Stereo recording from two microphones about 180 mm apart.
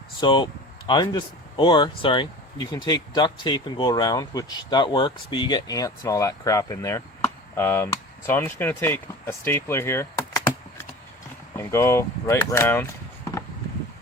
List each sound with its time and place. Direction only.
0.2 s speech: 25° left (ahead or behind)